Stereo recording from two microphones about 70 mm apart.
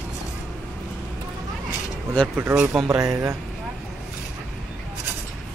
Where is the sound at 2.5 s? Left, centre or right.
Centre.